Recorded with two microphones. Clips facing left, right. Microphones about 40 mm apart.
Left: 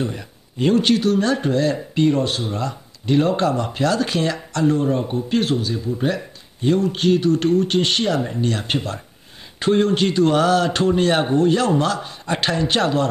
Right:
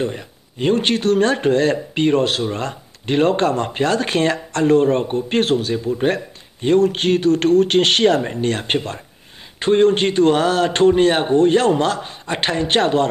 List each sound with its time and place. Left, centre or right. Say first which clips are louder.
0.2 s a sound: left 1 dB; centre
0.7 s speech: left 2 dB; right
1.0 s speech: right 3 dB; right
4.7 s speech: right 5 dB; right
5.9 s speech: right 4 dB; right
8.7 s speech: right 2 dB; right
9.8 s speech: right 3 dB; right
10.7 s speech: right 5 dB; right
11.0 s speech: right 3 dB; centre
11.3 s speech: right 6 dB; right
11.8 s a man's voice: right 2 dB; right